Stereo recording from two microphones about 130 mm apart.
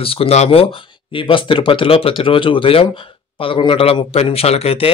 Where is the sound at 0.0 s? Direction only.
45° left (ahead or behind).